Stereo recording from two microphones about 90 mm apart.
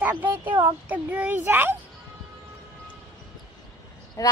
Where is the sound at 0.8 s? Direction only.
15° right (ahead or behind).